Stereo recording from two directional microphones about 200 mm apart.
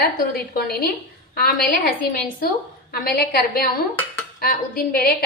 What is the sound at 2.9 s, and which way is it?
A woman's voice, 50° left (ahead or behind).